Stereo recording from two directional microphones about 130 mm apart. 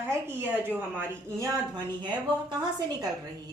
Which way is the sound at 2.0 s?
35° right (ahead or behind).